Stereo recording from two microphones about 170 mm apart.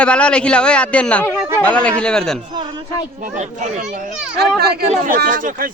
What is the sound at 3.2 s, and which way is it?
Speech, 50° right (ahead or behind).